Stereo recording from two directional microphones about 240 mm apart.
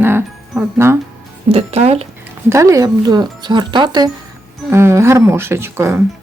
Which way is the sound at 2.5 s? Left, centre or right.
Centre.